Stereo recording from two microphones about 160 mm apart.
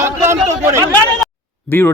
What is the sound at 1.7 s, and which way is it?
Speech, 10° left (ahead or behind).